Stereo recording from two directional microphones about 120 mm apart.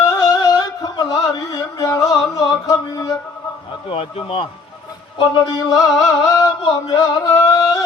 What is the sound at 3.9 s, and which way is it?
Speech, 50° left (ahead or behind).